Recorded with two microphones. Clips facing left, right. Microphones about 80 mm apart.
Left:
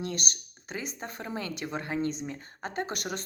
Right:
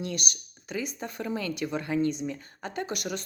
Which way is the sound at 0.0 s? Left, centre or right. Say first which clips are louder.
Right 1 dB; left.